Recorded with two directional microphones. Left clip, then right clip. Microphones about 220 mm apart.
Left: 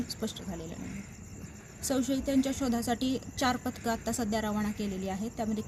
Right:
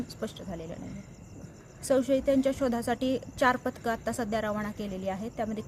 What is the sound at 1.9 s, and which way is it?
A woman's voice, 25° right (ahead or behind).